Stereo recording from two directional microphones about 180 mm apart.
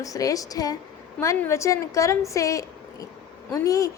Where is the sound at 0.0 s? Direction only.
20° left (ahead or behind).